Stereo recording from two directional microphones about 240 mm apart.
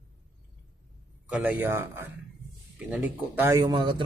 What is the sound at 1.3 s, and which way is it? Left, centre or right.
Speech, centre.